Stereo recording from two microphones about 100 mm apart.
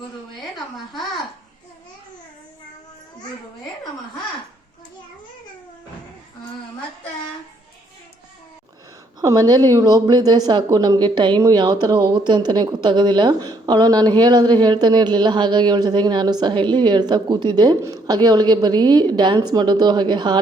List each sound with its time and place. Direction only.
9.2 s speech: 40° right (ahead or behind)
11.3 s speech: 35° right (ahead or behind)
11.6 s speech: 50° right (ahead or behind)